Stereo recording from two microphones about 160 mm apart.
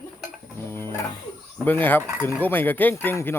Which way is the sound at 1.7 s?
10° left (ahead or behind).